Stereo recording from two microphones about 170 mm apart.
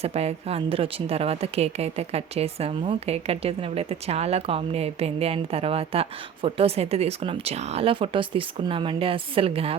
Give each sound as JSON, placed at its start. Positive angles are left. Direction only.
{"t": 0.0, "sound": "a woman's voice", "side_deg": -40}